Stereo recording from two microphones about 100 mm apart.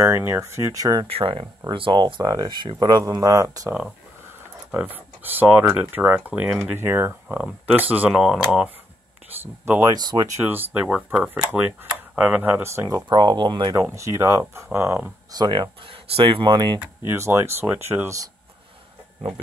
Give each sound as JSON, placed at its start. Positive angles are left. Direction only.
{"t": 0.0, "sound": "speech", "side_deg": -25}
{"t": 1.0, "sound": "speech", "side_deg": -70}
{"t": 1.7, "sound": "speech", "side_deg": -55}
{"t": 4.7, "sound": "speech", "side_deg": -20}
{"t": 9.8, "sound": "speech", "side_deg": -40}
{"t": 10.4, "sound": "speech", "side_deg": -20}
{"t": 12.6, "sound": "speech", "side_deg": -30}
{"t": 13.1, "sound": "speech", "side_deg": -50}
{"t": 13.7, "sound": "speech", "side_deg": -30}
{"t": 15.3, "sound": "speech", "side_deg": -50}
{"t": 17.1, "sound": "speech", "side_deg": -30}